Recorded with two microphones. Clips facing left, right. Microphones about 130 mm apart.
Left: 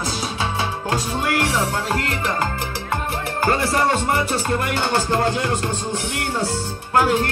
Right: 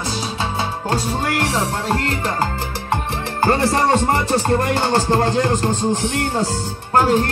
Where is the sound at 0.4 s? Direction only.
30° right (ahead or behind).